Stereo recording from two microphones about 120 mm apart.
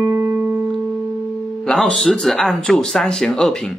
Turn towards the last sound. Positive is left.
turn(degrees=5)  # may be behind; listen again after turning